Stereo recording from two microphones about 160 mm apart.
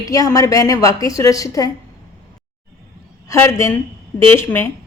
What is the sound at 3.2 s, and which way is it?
A woman's voice, 15° left (ahead or behind).